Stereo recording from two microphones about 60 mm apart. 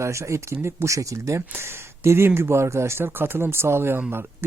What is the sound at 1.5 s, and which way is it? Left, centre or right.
Speech, right.